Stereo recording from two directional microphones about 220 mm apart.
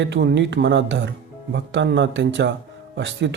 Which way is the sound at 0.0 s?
55° right (ahead or behind).